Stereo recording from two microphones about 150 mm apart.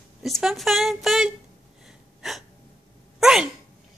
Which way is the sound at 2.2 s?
Centre (ahead or behind).